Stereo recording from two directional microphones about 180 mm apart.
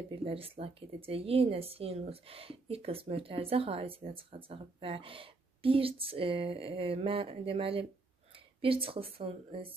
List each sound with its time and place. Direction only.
0.1 s speech: 30° right (ahead or behind)